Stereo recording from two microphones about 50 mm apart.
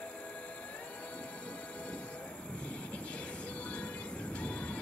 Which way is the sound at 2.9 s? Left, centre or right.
Left.